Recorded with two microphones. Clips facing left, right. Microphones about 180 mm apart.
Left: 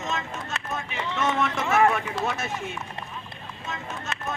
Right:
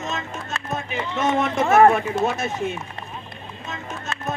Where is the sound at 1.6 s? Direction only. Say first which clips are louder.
Right 7 dB; 45° right (ahead or behind).